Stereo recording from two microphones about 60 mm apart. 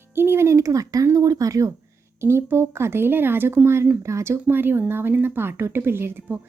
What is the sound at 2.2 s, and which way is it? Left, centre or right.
Speech, right.